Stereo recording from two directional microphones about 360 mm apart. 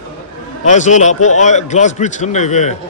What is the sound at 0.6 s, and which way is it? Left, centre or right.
A man's voice, centre.